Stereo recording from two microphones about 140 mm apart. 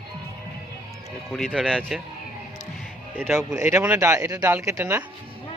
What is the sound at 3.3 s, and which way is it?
Speech, 20° right (ahead or behind).